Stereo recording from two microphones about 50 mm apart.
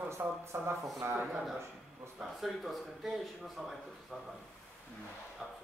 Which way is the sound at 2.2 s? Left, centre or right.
Centre.